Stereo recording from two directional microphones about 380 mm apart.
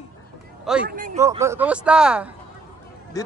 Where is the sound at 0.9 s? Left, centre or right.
Right.